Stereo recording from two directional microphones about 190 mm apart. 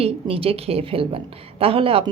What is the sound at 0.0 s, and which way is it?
Speech, 30° right (ahead or behind).